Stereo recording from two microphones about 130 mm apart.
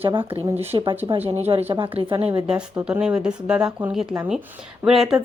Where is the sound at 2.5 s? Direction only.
5° right (ahead or behind).